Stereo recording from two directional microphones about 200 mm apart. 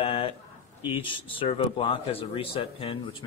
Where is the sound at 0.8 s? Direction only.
25° left (ahead or behind).